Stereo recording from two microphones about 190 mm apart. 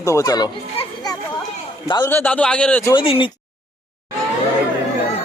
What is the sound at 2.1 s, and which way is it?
Speech, 10° left (ahead or behind).